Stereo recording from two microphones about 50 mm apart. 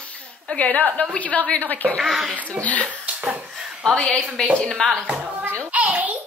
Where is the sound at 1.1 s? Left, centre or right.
Left.